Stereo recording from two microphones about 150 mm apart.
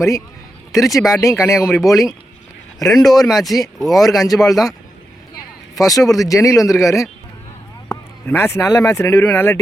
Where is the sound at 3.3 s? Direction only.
Centre (ahead or behind).